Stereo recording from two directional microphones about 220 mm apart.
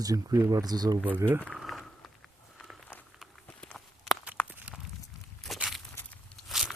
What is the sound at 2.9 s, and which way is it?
Walk, 5° left (ahead or behind).